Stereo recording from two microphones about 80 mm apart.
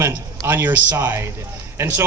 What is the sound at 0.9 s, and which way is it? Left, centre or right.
A man's voice, right.